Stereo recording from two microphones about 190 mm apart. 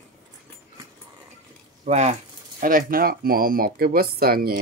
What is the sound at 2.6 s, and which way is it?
Speech, 50° right (ahead or behind).